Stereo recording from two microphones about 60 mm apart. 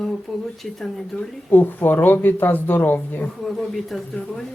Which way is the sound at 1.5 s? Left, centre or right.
Left.